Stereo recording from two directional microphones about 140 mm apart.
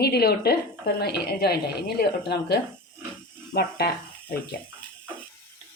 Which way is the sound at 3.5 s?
75° left (ahead or behind).